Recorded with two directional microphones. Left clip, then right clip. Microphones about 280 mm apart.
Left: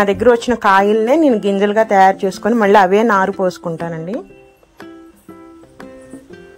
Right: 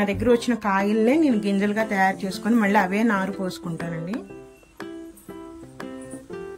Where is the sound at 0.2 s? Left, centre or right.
Left.